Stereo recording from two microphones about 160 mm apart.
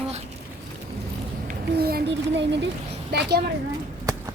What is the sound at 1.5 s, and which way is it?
Speech, 75° right (ahead or behind).